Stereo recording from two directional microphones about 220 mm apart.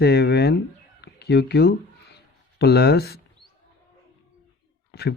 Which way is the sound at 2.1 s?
45° left (ahead or behind).